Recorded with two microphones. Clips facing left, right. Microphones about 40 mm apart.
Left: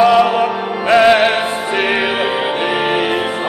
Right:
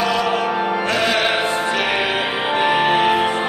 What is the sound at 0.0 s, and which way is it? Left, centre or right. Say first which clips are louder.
Music: left 8 dB; centre.